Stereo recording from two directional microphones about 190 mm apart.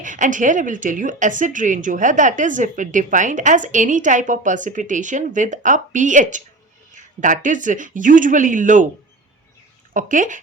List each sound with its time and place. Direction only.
0.0 s a woman's voice: 40° right (ahead or behind)
9.9 s a woman's voice: 45° right (ahead or behind)